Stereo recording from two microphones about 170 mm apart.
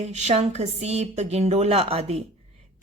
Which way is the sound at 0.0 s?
40° right (ahead or behind).